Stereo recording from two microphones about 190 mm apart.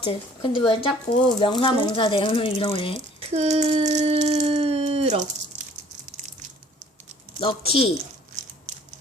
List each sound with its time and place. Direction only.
0.0 s speech: 25° left (ahead or behind)
3.2 s a sound: 35° right (ahead or behind)
7.3 s speech: 30° left (ahead or behind)